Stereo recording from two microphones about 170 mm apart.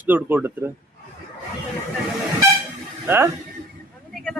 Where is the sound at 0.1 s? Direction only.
10° right (ahead or behind).